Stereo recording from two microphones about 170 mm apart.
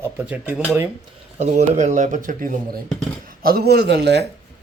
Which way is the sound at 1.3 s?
45° right (ahead or behind).